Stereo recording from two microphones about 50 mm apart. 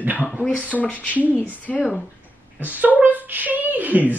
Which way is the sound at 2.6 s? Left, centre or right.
Right.